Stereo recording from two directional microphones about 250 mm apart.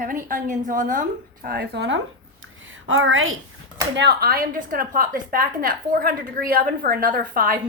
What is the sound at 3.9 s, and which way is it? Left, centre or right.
A woman's voice, right.